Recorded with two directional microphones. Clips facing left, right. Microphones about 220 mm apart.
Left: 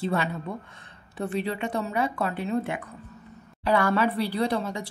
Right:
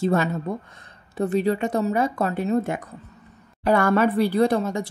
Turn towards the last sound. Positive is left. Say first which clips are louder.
# right 6 dB
turn(degrees=-45)  # may be behind; listen again after turning